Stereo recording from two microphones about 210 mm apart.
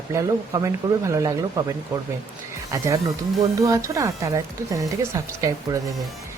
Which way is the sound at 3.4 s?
15° right (ahead or behind).